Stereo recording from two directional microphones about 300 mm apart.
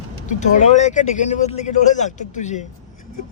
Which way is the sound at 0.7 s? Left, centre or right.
Left.